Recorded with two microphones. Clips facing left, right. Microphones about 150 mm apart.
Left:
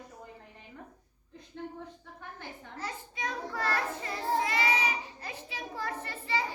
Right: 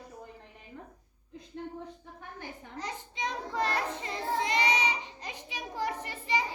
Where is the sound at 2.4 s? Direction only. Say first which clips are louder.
Right 1 dB; 20° right (ahead or behind).